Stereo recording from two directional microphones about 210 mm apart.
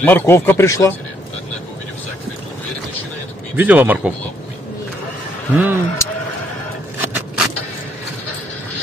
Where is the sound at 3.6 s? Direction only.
10° right (ahead or behind).